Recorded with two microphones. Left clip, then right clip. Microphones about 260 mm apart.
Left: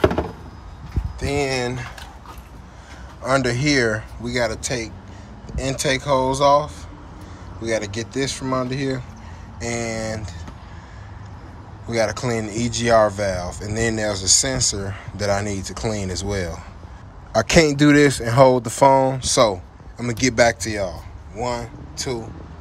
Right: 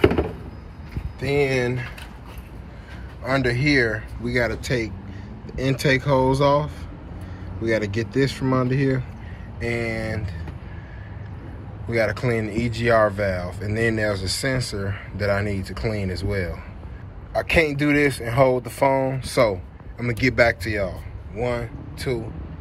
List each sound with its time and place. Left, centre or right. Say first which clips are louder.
1.2 s speech: right 1 dB; left
3.3 s speech: left 2 dB; left
4.2 s speech: right 1 dB; centre
11.9 s speech: left 1 dB; left
17.4 s a man's voice: left 4 dB; left